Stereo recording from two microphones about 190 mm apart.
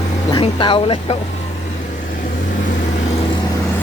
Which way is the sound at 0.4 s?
25° left (ahead or behind).